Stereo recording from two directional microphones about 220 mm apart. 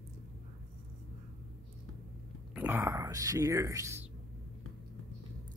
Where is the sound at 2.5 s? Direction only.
10° right (ahead or behind).